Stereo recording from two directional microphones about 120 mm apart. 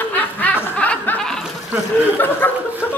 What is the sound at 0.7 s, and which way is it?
Chuckle, 10° left (ahead or behind).